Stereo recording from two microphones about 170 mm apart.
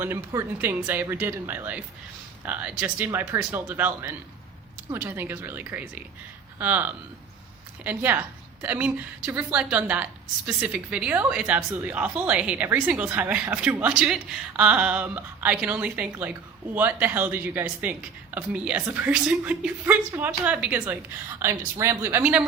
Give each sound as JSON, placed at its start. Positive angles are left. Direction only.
{"t": 0.0, "sound": "a woman's voice", "side_deg": -15}